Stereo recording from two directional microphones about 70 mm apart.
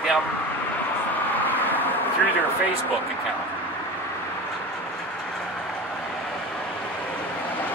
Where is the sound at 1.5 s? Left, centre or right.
Left.